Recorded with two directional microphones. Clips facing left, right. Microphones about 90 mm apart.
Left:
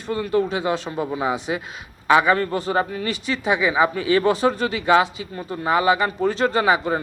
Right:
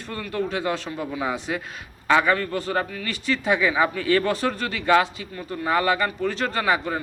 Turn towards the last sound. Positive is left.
turn(degrees=25)  # may be behind; listen again after turning